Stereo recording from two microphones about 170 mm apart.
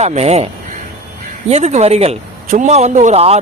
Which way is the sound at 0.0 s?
40° right (ahead or behind).